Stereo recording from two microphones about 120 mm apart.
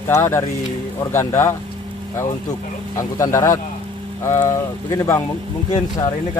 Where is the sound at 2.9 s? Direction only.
25° left (ahead or behind).